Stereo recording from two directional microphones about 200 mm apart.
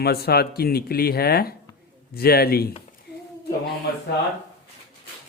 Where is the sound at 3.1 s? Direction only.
55° left (ahead or behind).